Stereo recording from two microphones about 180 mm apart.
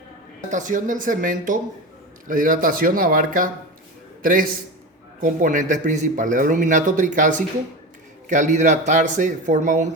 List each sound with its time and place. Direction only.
0.5 s a man's voice: 45° right (ahead or behind)